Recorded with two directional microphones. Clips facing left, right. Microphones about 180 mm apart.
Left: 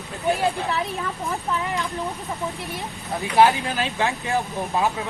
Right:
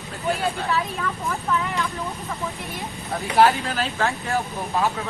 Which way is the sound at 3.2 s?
15° left (ahead or behind).